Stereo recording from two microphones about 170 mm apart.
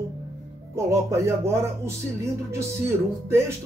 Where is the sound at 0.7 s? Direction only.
15° right (ahead or behind).